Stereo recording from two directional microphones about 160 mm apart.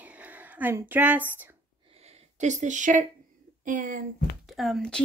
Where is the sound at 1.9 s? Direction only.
40° right (ahead or behind).